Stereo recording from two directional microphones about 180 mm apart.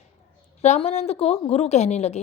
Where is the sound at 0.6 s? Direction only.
35° left (ahead or behind).